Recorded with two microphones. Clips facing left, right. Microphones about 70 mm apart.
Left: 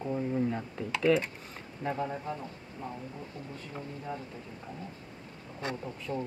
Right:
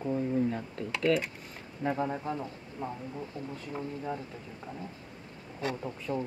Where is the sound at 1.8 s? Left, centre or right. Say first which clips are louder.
Right 2 dB; centre.